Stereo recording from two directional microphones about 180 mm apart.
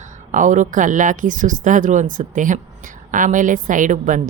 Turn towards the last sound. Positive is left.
turn(degrees=-45)  # may be behind; listen again after turning